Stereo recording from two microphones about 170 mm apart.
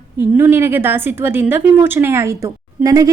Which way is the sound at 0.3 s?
10° right (ahead or behind).